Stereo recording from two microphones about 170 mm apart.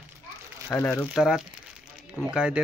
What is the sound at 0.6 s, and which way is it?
Speech, 10° left (ahead or behind).